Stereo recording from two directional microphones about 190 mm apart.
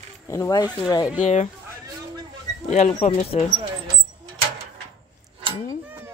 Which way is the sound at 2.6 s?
40° left (ahead or behind).